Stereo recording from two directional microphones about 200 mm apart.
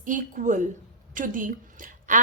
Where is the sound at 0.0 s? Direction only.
40° right (ahead or behind).